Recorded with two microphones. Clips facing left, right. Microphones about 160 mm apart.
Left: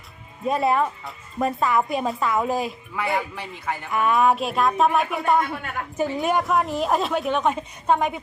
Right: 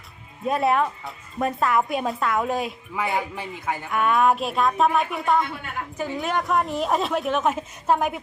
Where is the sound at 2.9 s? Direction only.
20° right (ahead or behind).